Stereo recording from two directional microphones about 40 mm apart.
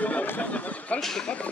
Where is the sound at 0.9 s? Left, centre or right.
Centre.